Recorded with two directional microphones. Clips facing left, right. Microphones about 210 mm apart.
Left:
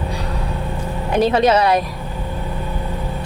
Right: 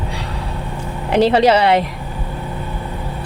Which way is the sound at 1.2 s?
30° right (ahead or behind).